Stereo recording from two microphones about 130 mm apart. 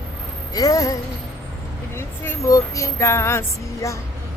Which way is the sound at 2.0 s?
20° left (ahead or behind).